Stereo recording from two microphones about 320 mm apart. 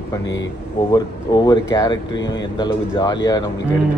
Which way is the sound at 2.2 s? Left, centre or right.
Left.